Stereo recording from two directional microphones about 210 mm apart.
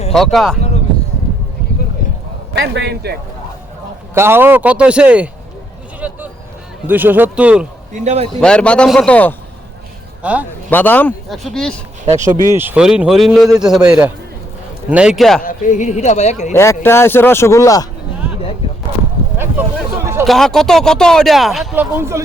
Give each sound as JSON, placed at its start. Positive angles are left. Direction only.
{"t": 0.1, "sound": "speech", "side_deg": 0}
{"t": 2.5, "sound": "a man's voice", "side_deg": -55}
{"t": 4.1, "sound": "a man's voice", "side_deg": -10}
{"t": 6.0, "sound": "a sound", "side_deg": -5}
{"t": 6.8, "sound": "a man's voice", "side_deg": -10}
{"t": 7.9, "sound": "a man's voice", "side_deg": -30}
{"t": 8.4, "sound": "speech", "side_deg": 5}
{"t": 10.2, "sound": "a man's voice", "side_deg": -5}
{"t": 10.7, "sound": "speech", "side_deg": 10}
{"t": 12.5, "sound": "speech", "side_deg": -10}
{"t": 15.4, "sound": "a man's voice", "side_deg": 40}
{"t": 16.6, "sound": "speech", "side_deg": 10}
{"t": 20.2, "sound": "speech", "side_deg": 0}